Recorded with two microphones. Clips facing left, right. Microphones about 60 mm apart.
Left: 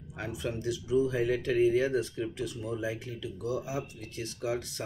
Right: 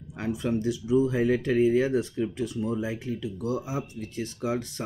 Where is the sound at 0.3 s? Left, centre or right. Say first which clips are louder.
Right 7 dB; right.